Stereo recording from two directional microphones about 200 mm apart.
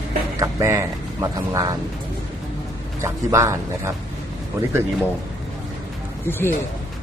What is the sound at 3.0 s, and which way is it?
Speech, 15° right (ahead or behind).